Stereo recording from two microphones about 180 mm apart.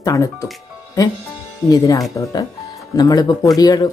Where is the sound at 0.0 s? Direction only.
20° left (ahead or behind).